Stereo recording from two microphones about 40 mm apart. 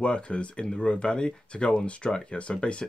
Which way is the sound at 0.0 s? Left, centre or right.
Left.